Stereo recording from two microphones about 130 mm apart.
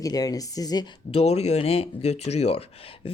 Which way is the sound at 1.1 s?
50° left (ahead or behind).